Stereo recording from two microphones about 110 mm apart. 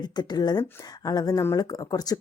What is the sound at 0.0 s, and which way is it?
Speech, 40° left (ahead or behind).